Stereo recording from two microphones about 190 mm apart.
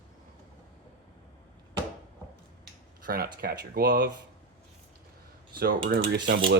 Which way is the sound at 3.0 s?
50° right (ahead or behind).